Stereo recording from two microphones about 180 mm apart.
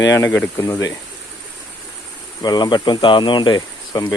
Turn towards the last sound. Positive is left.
turn(degrees=25)  # may be behind; listen again after turning